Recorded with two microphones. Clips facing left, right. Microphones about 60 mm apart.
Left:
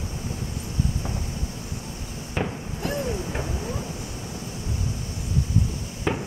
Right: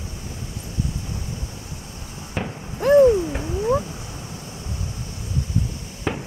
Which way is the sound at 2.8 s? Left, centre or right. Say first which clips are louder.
Right 16 dB; right.